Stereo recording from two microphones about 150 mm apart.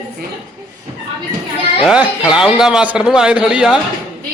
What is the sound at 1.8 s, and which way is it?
A man's voice, 5° right (ahead or behind).